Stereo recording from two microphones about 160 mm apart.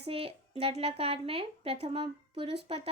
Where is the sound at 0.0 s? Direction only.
35° right (ahead or behind).